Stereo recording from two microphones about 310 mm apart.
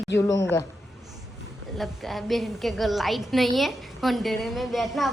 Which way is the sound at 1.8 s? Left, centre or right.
Centre.